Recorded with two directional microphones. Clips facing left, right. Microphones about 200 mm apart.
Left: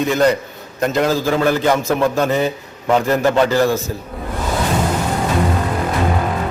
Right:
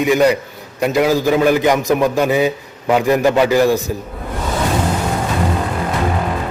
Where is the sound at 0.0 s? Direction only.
10° right (ahead or behind).